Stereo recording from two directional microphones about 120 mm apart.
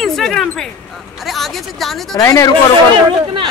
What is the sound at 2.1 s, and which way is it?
Speech, 30° left (ahead or behind).